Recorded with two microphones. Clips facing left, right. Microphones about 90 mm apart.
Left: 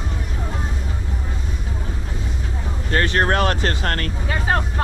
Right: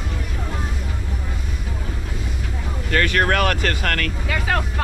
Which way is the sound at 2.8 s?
30° left (ahead or behind).